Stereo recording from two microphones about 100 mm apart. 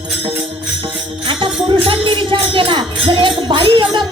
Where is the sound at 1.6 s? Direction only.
55° right (ahead or behind).